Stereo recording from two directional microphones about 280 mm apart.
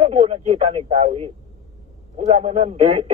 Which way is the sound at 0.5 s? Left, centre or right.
Right.